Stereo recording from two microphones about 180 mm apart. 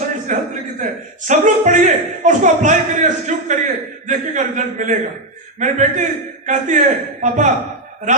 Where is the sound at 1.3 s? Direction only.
45° right (ahead or behind).